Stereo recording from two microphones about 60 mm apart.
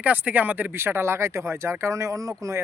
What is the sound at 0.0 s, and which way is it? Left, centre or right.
Speech, right.